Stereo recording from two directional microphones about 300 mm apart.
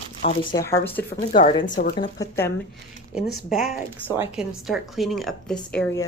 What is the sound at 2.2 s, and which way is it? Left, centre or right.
Speech, centre.